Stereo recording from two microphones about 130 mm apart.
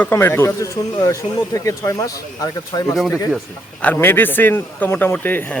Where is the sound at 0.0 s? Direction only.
20° left (ahead or behind).